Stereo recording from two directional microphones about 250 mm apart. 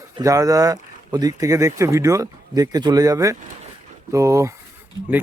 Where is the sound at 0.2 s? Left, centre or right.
Centre.